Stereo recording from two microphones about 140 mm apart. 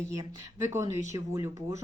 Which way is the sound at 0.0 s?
20° right (ahead or behind).